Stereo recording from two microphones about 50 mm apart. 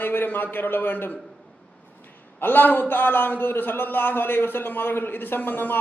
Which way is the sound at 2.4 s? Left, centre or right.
Left.